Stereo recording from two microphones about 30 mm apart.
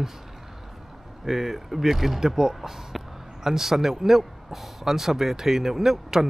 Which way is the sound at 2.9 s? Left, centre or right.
Centre.